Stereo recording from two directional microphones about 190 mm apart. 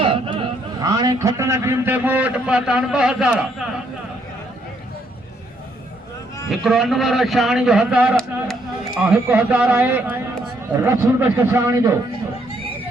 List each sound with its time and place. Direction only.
0.0 s a sound: 30° right (ahead or behind)
0.8 s a man's voice: 20° right (ahead or behind); by 3.7 s 5° right (ahead or behind)
6.5 s a man's voice: centre (ahead or behind)